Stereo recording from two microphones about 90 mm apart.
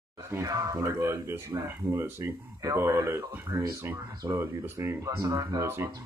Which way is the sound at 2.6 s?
30° right (ahead or behind).